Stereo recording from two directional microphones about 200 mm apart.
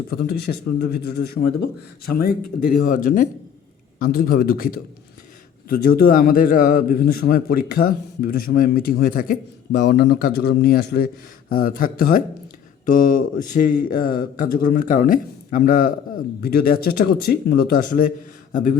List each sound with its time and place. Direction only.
0.1 s a man's voice: 55° left (ahead or behind)